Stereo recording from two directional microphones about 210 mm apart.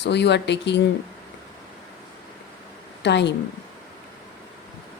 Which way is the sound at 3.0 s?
55° left (ahead or behind).